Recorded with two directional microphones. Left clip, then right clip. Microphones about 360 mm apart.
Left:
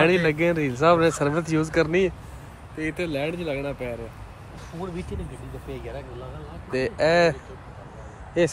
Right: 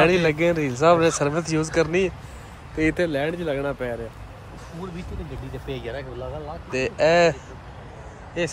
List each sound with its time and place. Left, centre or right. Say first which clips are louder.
0.0 s speech: right 2 dB; centre
2.8 s speech: right 7 dB; right
3.1 s speech: right 3 dB; centre
5.7 s speech: right 4 dB; right
6.7 s speech: right 2 dB; centre
8.4 s speech: left 4 dB; centre